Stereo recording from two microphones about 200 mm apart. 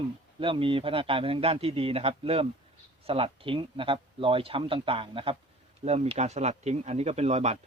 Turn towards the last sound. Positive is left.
turn(degrees=-35)  # may be behind; listen again after turning